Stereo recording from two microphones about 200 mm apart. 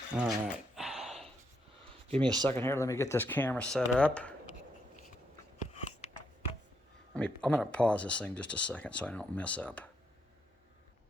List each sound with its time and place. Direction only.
0.2 s a sound: 5° right (ahead or behind)
2.2 s speech: 20° right (ahead or behind)
2.5 s speech: 10° left (ahead or behind)
7.1 s speech: 5° left (ahead or behind)